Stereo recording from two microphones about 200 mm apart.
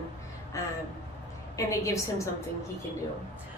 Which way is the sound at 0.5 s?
15° left (ahead or behind).